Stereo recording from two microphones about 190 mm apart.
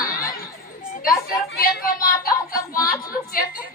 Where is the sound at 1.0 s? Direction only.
50° left (ahead or behind).